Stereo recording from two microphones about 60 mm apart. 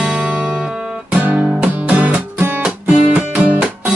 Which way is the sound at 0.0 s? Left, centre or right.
Centre.